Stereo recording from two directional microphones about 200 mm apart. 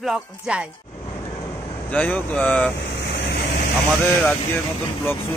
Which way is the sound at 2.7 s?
60° left (ahead or behind).